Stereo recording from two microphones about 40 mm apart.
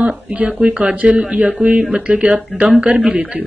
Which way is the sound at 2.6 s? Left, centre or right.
Right.